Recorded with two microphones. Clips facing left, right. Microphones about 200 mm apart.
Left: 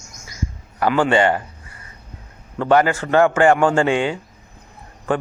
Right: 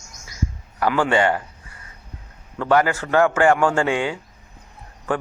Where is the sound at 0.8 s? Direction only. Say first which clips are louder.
Left 2 dB; 15° left (ahead or behind).